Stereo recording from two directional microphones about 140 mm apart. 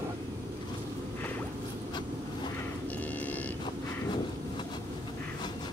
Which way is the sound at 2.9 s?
10° left (ahead or behind).